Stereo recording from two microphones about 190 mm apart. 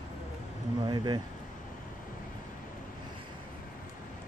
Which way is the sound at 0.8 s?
25° right (ahead or behind).